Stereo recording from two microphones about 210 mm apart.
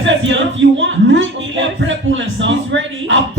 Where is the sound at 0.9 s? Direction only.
60° right (ahead or behind).